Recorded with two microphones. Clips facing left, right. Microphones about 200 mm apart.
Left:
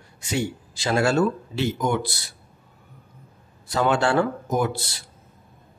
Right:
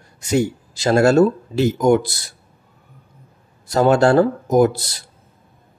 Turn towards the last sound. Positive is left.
turn(degrees=-40)  # may be behind; listen again after turning